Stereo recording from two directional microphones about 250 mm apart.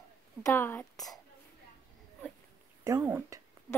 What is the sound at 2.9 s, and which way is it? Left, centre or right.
Speech, centre.